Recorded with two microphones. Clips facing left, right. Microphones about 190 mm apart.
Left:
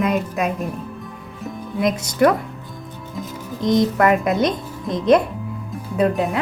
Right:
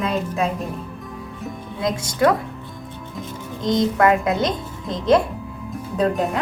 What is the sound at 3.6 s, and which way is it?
Speech, 20° left (ahead or behind).